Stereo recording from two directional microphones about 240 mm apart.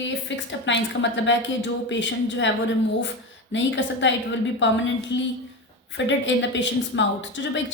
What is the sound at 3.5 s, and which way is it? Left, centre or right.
A woman's voice, left.